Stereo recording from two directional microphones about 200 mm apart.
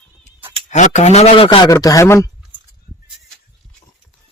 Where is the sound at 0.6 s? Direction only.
35° left (ahead or behind).